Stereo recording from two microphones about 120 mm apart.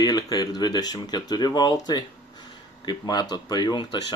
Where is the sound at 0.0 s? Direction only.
35° left (ahead or behind).